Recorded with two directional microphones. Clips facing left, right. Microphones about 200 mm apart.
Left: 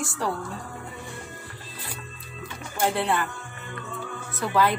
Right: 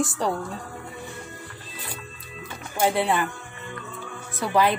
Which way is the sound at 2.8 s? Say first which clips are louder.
Right 2 dB; 15° right (ahead or behind).